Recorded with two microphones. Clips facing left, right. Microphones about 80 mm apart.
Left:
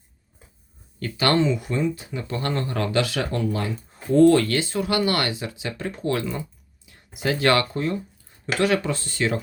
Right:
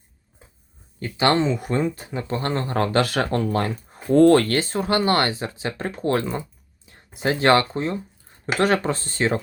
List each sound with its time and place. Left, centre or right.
0.9 s speech: right
1.5 s speech: right
8.5 s speech: right